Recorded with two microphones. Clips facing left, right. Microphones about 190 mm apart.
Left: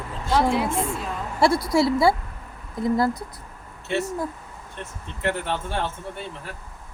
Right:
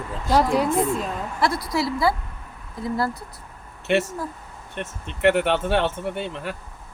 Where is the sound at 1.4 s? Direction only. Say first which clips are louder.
Left 5 dB; 25° left (ahead or behind).